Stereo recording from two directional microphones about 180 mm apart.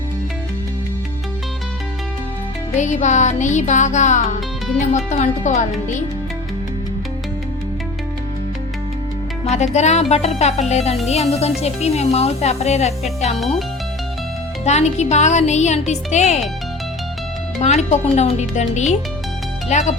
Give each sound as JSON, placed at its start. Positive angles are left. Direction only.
{"t": 2.7, "sound": "speech", "side_deg": 40}
{"t": 9.4, "sound": "music", "side_deg": 40}
{"t": 9.7, "sound": "speech", "side_deg": 40}
{"t": 14.6, "sound": "speech", "side_deg": 40}
{"t": 17.6, "sound": "speech", "side_deg": 40}